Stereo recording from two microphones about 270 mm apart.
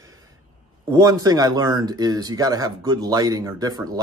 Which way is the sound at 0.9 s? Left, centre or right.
Centre.